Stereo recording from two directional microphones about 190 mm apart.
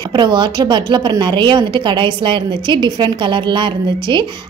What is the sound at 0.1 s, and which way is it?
A woman's voice, 25° right (ahead or behind).